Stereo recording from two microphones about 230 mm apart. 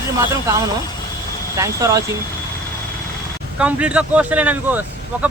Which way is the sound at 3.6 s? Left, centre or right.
Centre.